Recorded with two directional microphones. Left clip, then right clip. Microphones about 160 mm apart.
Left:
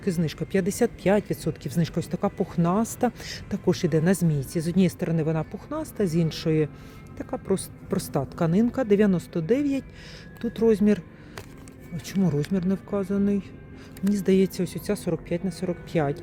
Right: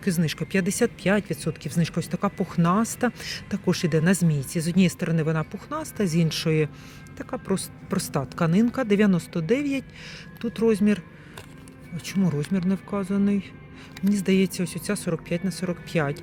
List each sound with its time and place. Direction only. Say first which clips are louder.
0.0 s speech: right 1 dB; 5° left (ahead or behind)